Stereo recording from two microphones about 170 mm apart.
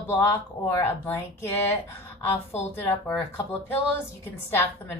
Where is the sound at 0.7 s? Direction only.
10° left (ahead or behind).